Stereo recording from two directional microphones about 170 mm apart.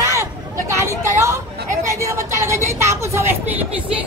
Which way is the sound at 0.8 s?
15° right (ahead or behind).